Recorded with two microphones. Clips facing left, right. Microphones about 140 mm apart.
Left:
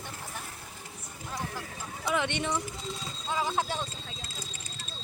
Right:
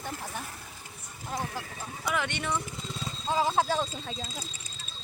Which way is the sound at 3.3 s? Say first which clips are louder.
Right 4 dB; 35° right (ahead or behind).